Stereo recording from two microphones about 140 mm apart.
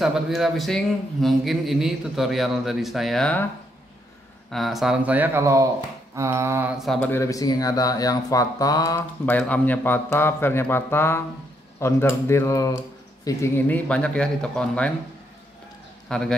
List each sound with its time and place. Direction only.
0.0 s a man's voice: centre (ahead or behind)
4.5 s speech: centre (ahead or behind); by 6.7 s 15° right (ahead or behind)
6.7 s a man's voice: centre (ahead or behind)
7.0 s speech: 15° left (ahead or behind)
9.2 s a man's voice: 10° left (ahead or behind)
16.1 s a man's voice: 5° left (ahead or behind)